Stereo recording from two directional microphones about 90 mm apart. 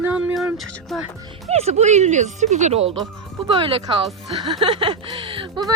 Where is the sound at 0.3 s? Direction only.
Centre (ahead or behind).